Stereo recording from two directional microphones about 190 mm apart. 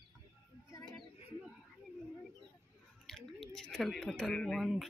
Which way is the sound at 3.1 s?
Centre (ahead or behind).